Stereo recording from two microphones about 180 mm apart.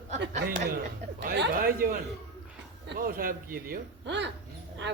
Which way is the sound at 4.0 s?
75° right (ahead or behind).